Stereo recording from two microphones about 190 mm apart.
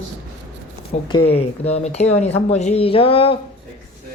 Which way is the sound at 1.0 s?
30° left (ahead or behind).